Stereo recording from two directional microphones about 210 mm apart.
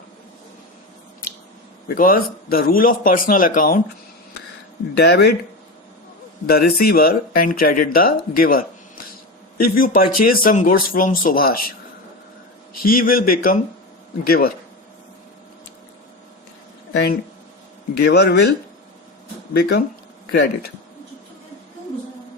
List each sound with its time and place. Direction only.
1.9 s speech: 45° left (ahead or behind)
4.9 s speech: 50° left (ahead or behind)
6.5 s speech: 45° left (ahead or behind)
12.8 s speech: 40° left (ahead or behind)
16.9 s speech: 50° left (ahead or behind)
19.5 s speech: 50° left (ahead or behind)